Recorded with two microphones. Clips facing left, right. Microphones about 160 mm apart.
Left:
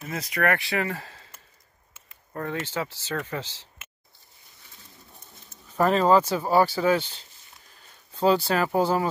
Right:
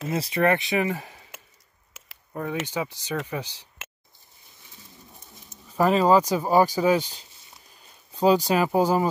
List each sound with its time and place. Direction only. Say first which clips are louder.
0.1 s speech: right 3 dB; 25° right (ahead or behind)
2.6 s speech: right 1 dB; 15° right (ahead or behind)
5.7 s speech: right 1 dB; 5° right (ahead or behind)